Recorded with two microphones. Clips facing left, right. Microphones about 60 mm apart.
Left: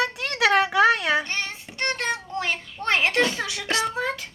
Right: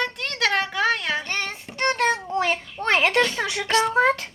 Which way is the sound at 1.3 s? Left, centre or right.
Right.